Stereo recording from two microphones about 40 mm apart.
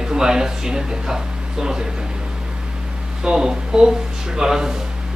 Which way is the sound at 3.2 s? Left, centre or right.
Centre.